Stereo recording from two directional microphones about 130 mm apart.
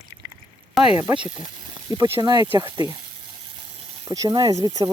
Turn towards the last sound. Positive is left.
turn(degrees=-30)  # may be behind; listen again after turning